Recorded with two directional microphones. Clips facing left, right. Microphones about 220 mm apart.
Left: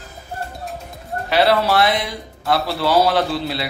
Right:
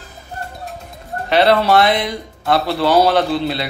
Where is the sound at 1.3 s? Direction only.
5° left (ahead or behind).